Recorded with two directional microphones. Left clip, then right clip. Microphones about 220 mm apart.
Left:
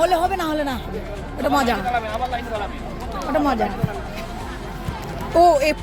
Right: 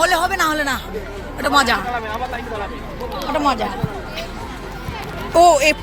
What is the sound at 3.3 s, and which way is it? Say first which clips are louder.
Speech: right 2 dB; 45° left (ahead or behind).